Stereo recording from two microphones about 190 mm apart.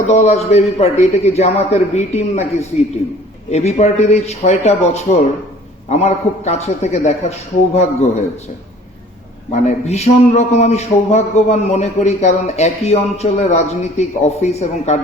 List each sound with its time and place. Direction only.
0.1 s a man's voice: 35° left (ahead or behind)
9.5 s a man's voice: 35° left (ahead or behind)